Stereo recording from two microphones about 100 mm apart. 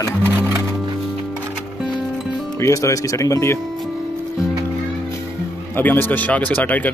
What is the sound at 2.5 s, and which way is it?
Speech, 30° left (ahead or behind).